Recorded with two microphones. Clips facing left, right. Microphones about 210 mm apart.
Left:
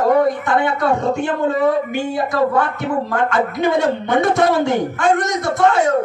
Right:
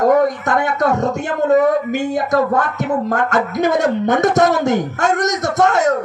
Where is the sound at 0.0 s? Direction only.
45° right (ahead or behind).